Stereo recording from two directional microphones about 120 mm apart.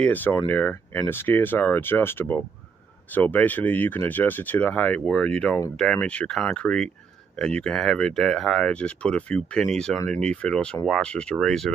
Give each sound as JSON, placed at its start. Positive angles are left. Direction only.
{"t": 0.0, "sound": "speech", "side_deg": 15}